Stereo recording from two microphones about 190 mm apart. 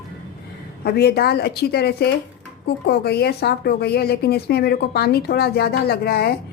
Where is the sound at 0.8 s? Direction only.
55° left (ahead or behind).